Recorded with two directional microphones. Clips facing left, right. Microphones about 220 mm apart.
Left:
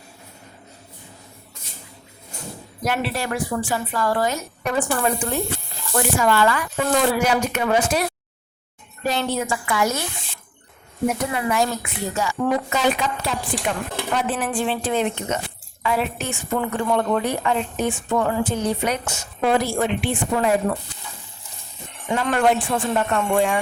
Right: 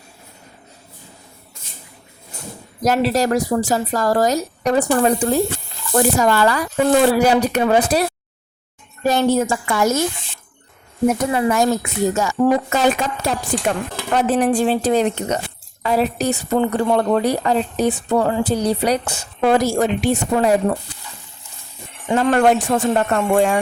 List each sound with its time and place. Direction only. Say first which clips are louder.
2.8 s speech: right 8 dB; 40° right (ahead or behind)
9.0 s a woman's voice: right 7 dB; 45° right (ahead or behind)
11.3 s a woman's voice: right 5 dB; 40° right (ahead or behind)
22.1 s a woman's voice: right 5 dB; 40° right (ahead or behind)